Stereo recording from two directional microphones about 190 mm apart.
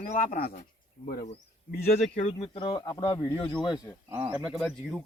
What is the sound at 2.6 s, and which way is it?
Speech, 20° left (ahead or behind).